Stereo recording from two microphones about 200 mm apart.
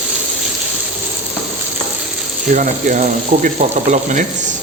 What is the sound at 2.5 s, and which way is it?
Frying, 40° right (ahead or behind).